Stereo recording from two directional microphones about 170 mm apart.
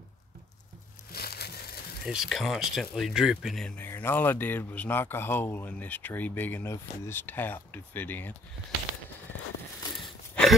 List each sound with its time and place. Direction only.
1.1 s crushing: 65° left (ahead or behind)
2.0 s speech: centre (ahead or behind)
9.9 s a sound: centre (ahead or behind)